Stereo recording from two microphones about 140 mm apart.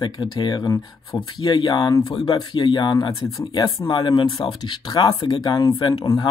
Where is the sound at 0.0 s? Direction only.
30° left (ahead or behind).